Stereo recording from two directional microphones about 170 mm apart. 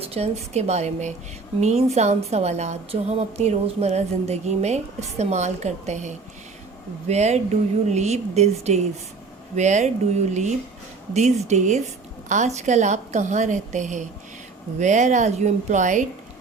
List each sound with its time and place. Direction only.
0.0 s a woman's voice: 35° right (ahead or behind)
11.1 s a woman's voice: 40° right (ahead or behind)